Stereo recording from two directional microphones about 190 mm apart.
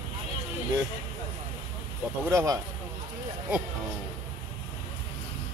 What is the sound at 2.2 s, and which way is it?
Speech, 15° right (ahead or behind).